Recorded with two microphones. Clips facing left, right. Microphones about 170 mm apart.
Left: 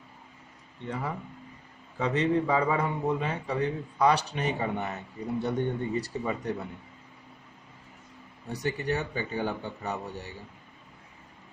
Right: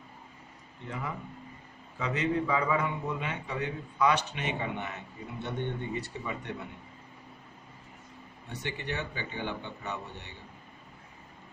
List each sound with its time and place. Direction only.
2.0 s a man's voice: 35° left (ahead or behind)
8.4 s a man's voice: 40° left (ahead or behind)